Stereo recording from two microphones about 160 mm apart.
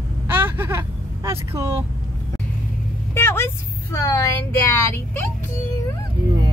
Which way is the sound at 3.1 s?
15° left (ahead or behind).